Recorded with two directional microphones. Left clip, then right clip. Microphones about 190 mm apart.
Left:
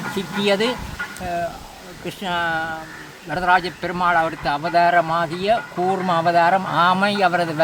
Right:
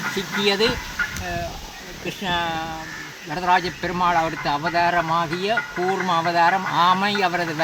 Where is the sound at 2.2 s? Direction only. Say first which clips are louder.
Left 2 dB; 20° left (ahead or behind).